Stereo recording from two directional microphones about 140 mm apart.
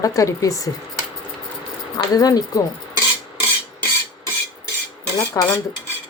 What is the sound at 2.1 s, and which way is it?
Speech, 25° left (ahead or behind).